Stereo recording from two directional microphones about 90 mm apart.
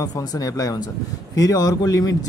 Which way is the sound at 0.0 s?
45° left (ahead or behind).